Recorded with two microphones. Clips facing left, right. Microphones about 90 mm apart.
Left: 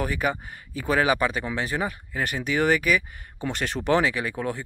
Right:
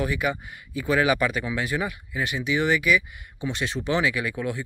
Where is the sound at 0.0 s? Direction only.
40° left (ahead or behind); by 4.0 s 55° left (ahead or behind).